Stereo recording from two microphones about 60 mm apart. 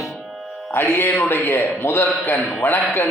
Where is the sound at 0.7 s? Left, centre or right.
Left.